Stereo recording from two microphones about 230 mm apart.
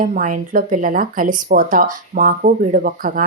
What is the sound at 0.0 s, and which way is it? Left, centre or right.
Speech, right.